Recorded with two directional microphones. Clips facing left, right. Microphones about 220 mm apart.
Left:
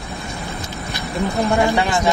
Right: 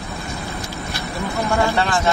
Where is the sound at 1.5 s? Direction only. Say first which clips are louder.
Even; 20° left (ahead or behind).